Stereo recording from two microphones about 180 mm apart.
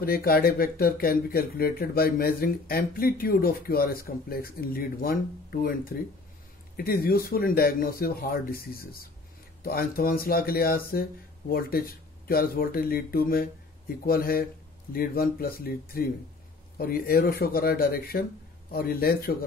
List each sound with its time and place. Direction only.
0.0 s speech: 55° left (ahead or behind)